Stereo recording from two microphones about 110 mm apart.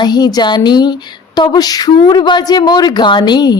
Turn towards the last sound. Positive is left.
turn(degrees=40)  # may be behind; listen again after turning